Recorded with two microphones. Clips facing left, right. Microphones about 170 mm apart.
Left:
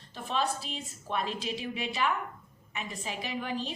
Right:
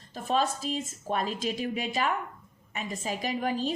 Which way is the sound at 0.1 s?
40° right (ahead or behind).